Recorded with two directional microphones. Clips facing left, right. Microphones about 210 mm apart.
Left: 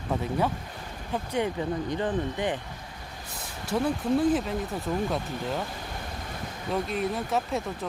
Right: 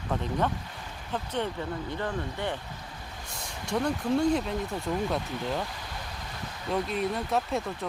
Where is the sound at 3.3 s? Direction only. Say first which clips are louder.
Left 1 dB; 5° left (ahead or behind).